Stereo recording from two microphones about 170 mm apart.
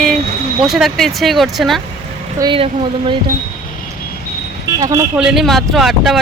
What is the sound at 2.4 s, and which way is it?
Speech, 30° right (ahead or behind).